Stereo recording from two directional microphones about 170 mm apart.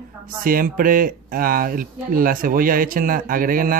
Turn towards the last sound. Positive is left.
turn(degrees=-55)  # may be behind; listen again after turning